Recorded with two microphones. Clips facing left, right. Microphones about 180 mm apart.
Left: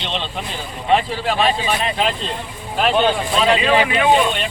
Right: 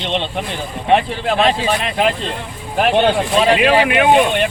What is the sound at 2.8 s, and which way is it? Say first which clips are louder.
Speech: right 3 dB; 60° right (ahead or behind).